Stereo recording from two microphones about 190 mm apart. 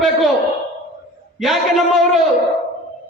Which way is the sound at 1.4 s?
Centre (ahead or behind).